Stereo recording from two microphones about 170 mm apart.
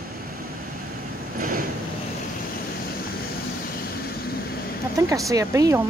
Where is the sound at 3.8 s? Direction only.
65° left (ahead or behind).